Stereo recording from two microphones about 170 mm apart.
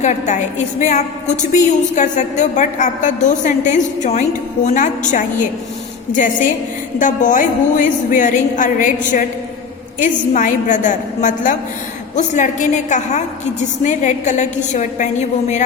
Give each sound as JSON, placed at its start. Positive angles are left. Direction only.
{"t": 0.0, "sound": "a woman's voice", "side_deg": 45}